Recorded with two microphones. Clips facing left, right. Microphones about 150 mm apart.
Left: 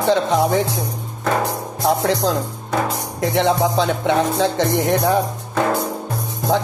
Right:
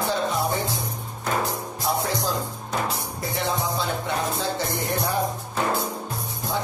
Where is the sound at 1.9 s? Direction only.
90° left.